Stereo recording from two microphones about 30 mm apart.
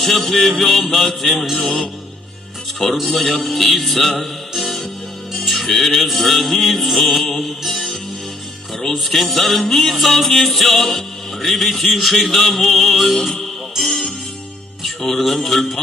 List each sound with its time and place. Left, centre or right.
0.0 s music: centre
2.7 s speech: centre
5.3 s music: centre
9.0 s music: centre